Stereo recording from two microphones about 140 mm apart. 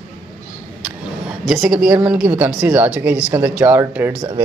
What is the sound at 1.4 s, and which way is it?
A woman's voice, centre (ahead or behind).